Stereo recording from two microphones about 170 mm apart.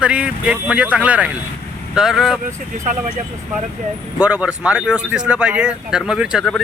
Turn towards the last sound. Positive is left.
turn(degrees=0)  # may be behind; listen again after turning